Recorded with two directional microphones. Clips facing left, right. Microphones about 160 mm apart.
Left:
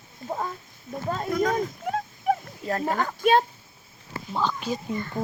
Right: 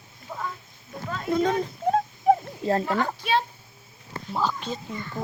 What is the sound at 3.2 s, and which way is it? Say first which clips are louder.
Speech: left 5 dB; 45° left (ahead or behind).